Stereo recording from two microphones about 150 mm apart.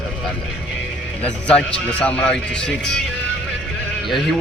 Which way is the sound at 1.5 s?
10° left (ahead or behind).